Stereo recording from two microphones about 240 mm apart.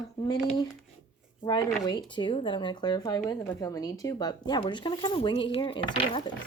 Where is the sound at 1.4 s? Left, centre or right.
Centre.